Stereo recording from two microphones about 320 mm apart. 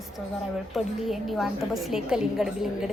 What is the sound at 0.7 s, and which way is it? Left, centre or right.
A woman's voice, centre.